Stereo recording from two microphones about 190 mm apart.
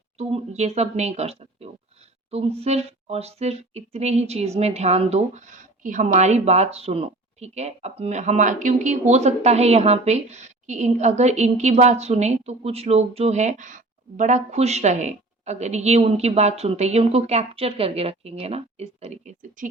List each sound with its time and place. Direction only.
0.2 s speech: 35° right (ahead or behind)